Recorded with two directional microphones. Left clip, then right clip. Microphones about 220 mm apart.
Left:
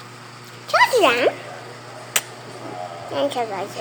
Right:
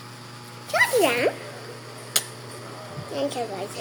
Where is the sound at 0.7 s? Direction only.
Centre (ahead or behind).